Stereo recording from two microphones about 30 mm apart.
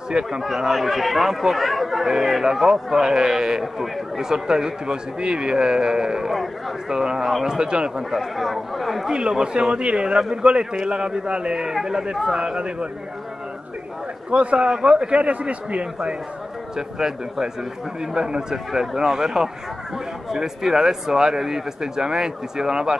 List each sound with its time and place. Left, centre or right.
0.1 s a man's voice: right
0.7 s speech: centre
1.9 s speech: centre; by 8.0 s right
8.1 s speech: centre
9.4 s a man's voice: right
14.3 s a man's voice: right
14.7 s a man's voice: right
16.7 s speech: centre